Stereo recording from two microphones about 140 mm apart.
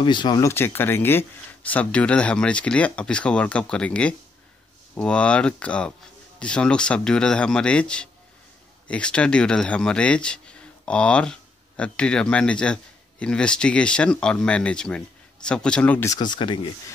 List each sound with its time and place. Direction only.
0.0 s speech: 35° left (ahead or behind)
0.5 s a man's voice: 15° left (ahead or behind)
16.1 s speech: 30° left (ahead or behind)